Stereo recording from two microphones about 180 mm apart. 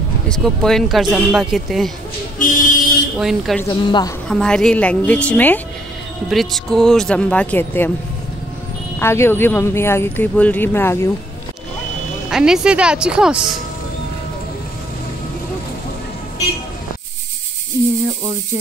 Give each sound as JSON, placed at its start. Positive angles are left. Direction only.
{"t": 0.3, "sound": "speech", "side_deg": 5}
{"t": 2.3, "sound": "a sound", "side_deg": 45}
{"t": 3.2, "sound": "speech", "side_deg": 0}
{"t": 3.6, "sound": "speech", "side_deg": 25}
{"t": 4.3, "sound": "speech", "side_deg": 5}
{"t": 9.0, "sound": "speech", "side_deg": 15}
{"t": 12.3, "sound": "speech", "side_deg": -5}